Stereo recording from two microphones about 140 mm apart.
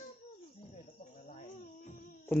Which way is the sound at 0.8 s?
60° left (ahead or behind).